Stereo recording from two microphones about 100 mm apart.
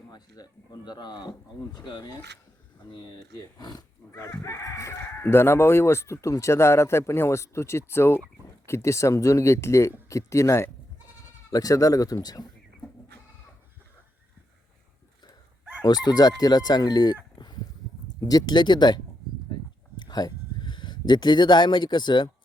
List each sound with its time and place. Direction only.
0.1 s speech: 40° left (ahead or behind)
3.3 s chicken: 35° left (ahead or behind)
4.1 s speech: 25° left (ahead or behind)
10.1 s chicken: 30° left (ahead or behind)
16.0 s chicken: 40° left (ahead or behind)
17.3 s a sound: 45° left (ahead or behind)
18.2 s speech: 40° left (ahead or behind)